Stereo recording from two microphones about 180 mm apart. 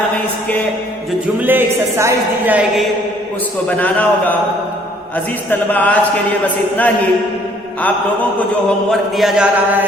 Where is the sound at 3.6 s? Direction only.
10° left (ahead or behind).